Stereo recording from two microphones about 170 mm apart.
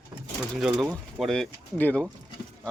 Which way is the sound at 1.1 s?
Centre (ahead or behind).